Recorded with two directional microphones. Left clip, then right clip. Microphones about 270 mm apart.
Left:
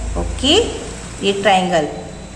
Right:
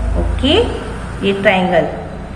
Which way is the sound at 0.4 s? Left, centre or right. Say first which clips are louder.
Right 1 dB; left.